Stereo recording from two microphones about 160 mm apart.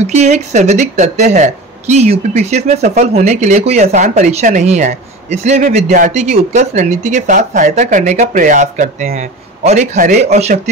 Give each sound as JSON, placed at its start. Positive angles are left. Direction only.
{"t": 0.0, "sound": "speech", "side_deg": -45}